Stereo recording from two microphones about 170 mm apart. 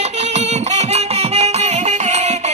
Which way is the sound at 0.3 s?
40° right (ahead or behind).